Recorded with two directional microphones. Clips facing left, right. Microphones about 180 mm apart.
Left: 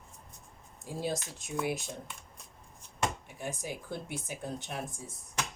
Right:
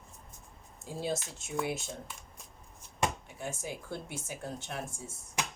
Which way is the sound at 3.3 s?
15° left (ahead or behind).